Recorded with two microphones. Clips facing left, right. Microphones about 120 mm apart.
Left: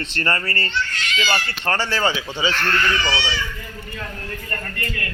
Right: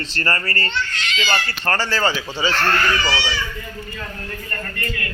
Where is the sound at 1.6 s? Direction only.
15° left (ahead or behind).